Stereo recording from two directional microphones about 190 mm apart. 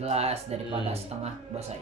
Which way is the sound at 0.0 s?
35° right (ahead or behind).